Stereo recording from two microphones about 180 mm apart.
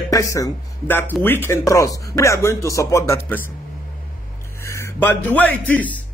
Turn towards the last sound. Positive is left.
turn(degrees=10)  # may be behind; listen again after turning